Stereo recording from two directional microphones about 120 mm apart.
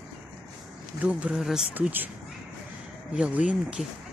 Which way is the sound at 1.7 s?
15° right (ahead or behind).